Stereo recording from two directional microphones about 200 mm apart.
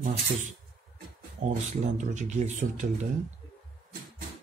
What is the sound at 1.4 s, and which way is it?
Speech, 35° right (ahead or behind).